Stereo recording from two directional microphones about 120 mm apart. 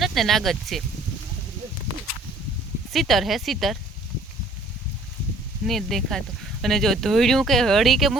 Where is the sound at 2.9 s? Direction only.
Centre (ahead or behind).